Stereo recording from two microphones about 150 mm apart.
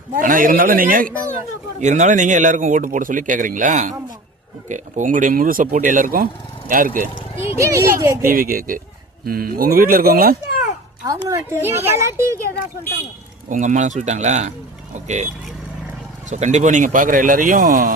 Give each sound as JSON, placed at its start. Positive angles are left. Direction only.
{"t": 0.1, "sound": "a man's voice", "side_deg": -65}
{"t": 1.8, "sound": "speech", "side_deg": -50}
{"t": 7.5, "sound": "a child's voice", "side_deg": -20}
{"t": 8.2, "sound": "a man's voice", "side_deg": -70}
{"t": 9.2, "sound": "speech", "side_deg": -80}
{"t": 11.0, "sound": "a child's voice", "side_deg": -20}
{"t": 13.5, "sound": "speech", "side_deg": -55}
{"t": 16.3, "sound": "speech", "side_deg": -50}